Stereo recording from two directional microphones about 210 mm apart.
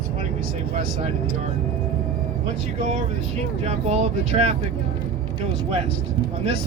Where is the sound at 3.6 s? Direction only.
30° right (ahead or behind).